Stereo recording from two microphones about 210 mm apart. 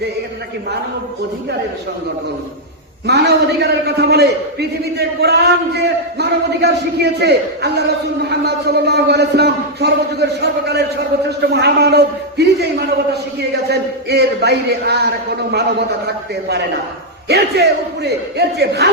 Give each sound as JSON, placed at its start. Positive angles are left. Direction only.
{"t": 3.1, "sound": "a man's voice", "side_deg": -50}
{"t": 13.7, "sound": "a man's voice", "side_deg": -50}